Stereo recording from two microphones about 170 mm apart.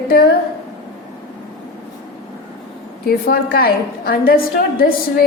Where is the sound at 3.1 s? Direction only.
60° left (ahead or behind).